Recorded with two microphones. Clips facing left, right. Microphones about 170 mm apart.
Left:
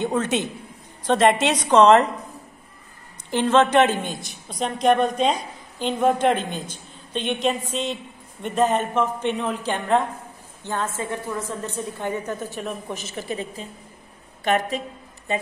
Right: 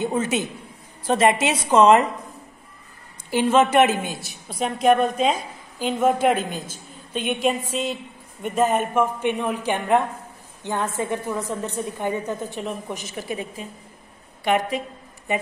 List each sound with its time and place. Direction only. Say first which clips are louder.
0.0 s a man's voice: even; 5° right (ahead or behind)
3.3 s a woman's voice: even; 10° right (ahead or behind)